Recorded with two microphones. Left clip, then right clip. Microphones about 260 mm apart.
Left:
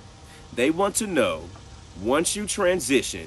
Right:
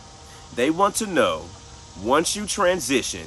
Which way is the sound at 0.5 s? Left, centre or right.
Centre.